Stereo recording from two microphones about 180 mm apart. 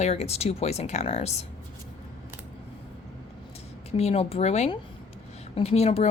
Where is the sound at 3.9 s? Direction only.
35° left (ahead or behind).